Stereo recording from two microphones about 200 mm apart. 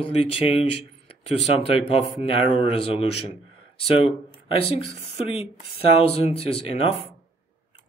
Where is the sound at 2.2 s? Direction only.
30° left (ahead or behind).